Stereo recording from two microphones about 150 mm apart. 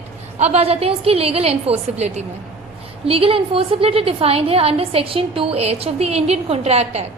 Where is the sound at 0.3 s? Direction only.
45° right (ahead or behind).